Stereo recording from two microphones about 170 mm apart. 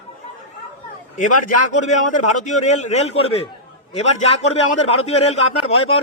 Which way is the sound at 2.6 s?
40° left (ahead or behind).